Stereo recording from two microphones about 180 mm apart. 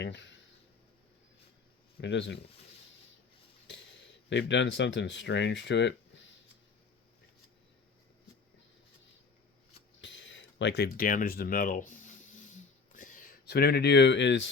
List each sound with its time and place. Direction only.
0.0 s speech: 85° left
2.0 s speech: 80° left
4.3 s speech: 75° left (ahead or behind)
10.0 s a sound: 90° left; by 13.3 s 45° left (ahead or behind)
13.4 s speech: 65° left (ahead or behind); by 14.5 s 85° left